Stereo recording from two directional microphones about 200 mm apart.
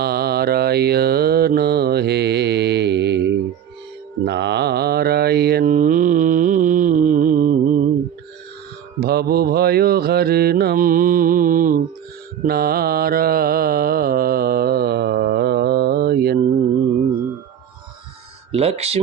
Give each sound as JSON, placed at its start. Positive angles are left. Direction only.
{"t": 0.0, "sound": "mantra", "side_deg": -50}
{"t": 9.0, "sound": "mantra", "side_deg": -50}
{"t": 18.5, "sound": "a sound", "side_deg": -30}